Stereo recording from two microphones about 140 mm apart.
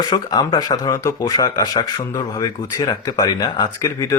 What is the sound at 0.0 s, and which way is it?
Speech, 30° left (ahead or behind).